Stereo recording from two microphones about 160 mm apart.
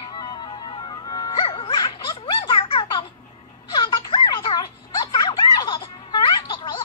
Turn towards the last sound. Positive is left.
turn(degrees=30)  # may be behind; listen again after turning